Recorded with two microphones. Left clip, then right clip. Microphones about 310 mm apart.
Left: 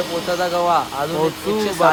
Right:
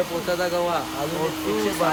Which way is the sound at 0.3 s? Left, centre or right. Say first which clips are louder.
Left 7 dB; centre.